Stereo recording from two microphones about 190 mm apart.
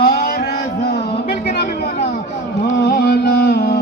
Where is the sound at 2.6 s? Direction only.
60° left (ahead or behind).